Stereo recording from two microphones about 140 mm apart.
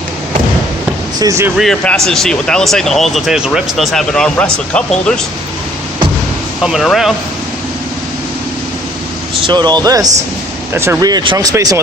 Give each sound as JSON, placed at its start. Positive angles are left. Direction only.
{"t": 1.2, "sound": "speech", "side_deg": -25}
{"t": 1.5, "sound": "speech", "side_deg": 5}
{"t": 6.6, "sound": "speech", "side_deg": -5}
{"t": 9.4, "sound": "speech", "side_deg": -30}